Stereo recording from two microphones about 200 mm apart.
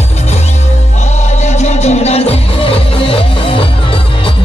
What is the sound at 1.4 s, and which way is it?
Music, 35° left (ahead or behind).